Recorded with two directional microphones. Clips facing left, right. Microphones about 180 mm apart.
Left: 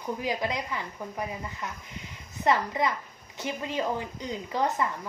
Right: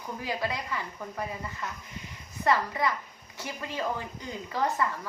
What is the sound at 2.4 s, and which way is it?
A woman's voice, 20° left (ahead or behind).